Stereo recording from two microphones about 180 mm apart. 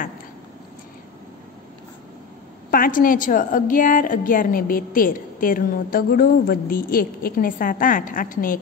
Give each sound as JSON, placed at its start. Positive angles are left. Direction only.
{"t": 2.7, "sound": "a woman's voice", "side_deg": 50}